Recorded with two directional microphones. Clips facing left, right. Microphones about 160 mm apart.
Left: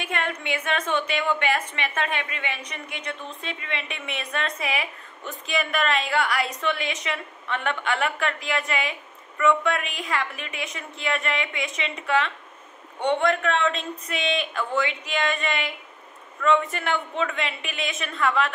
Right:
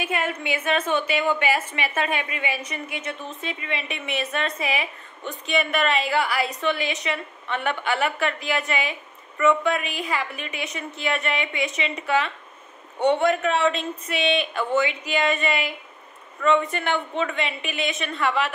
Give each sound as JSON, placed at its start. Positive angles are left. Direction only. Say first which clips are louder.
{"t": 0.0, "sound": "a woman's voice", "louder": "right 3 dB", "side_deg": -5}